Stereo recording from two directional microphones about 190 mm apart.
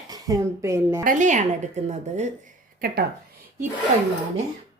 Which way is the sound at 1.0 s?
40° right (ahead or behind).